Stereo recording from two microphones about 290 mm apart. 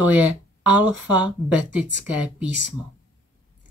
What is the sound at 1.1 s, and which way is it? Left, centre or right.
Speech, centre.